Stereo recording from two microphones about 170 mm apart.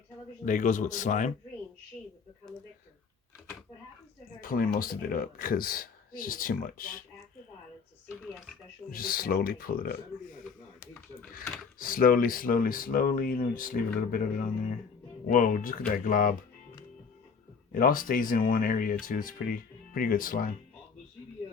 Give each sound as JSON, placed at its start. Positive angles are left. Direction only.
{"t": 0.4, "sound": "speech", "side_deg": 50}
{"t": 4.4, "sound": "speech", "side_deg": 55}
{"t": 8.9, "sound": "speech", "side_deg": 60}
{"t": 11.8, "sound": "speech", "side_deg": 55}
{"t": 17.7, "sound": "speech", "side_deg": 55}